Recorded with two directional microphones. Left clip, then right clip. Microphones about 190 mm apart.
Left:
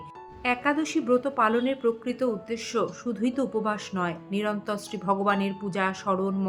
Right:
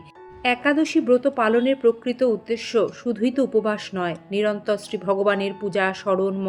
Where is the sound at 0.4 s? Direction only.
30° right (ahead or behind).